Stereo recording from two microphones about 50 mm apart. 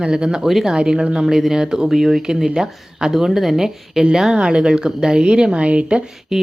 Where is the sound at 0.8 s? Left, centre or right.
Centre.